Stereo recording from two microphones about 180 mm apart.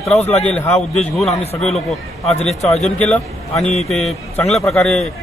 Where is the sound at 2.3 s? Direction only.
35° left (ahead or behind).